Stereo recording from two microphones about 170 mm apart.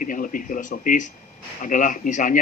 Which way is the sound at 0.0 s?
50° left (ahead or behind).